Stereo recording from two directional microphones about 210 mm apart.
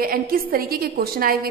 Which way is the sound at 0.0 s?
45° right (ahead or behind).